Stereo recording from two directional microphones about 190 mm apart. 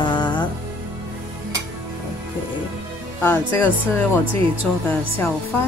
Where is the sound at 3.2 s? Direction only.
10° left (ahead or behind).